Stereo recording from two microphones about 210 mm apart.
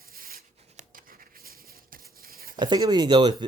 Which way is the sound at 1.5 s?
45° right (ahead or behind).